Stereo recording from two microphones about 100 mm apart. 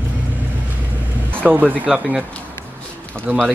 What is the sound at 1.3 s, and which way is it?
Speech, 15° right (ahead or behind).